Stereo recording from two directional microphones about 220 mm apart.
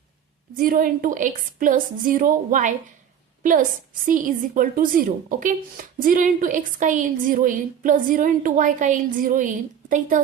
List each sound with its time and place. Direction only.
0.6 s speech: 40° right (ahead or behind)
4.0 s speech: 35° right (ahead or behind)